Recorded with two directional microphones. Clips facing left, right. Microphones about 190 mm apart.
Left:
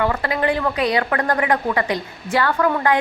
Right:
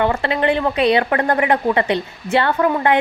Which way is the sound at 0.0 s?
25° right (ahead or behind).